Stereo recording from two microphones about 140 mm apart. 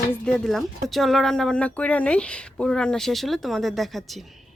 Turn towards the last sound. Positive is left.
turn(degrees=0)  # may be behind; listen again after turning